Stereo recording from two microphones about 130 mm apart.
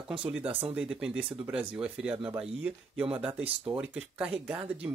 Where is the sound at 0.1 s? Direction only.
10° right (ahead or behind).